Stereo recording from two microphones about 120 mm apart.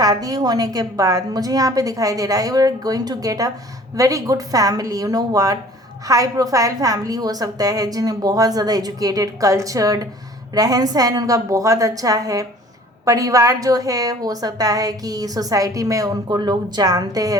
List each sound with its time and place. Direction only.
0.0 s a woman's voice: 30° right (ahead or behind)